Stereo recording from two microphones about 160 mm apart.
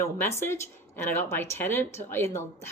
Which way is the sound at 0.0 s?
15° left (ahead or behind).